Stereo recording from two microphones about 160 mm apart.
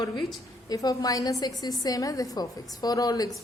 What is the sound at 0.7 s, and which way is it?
A woman's voice, 25° left (ahead or behind).